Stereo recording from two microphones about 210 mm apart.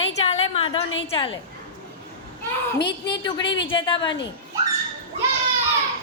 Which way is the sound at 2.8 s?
20° left (ahead or behind).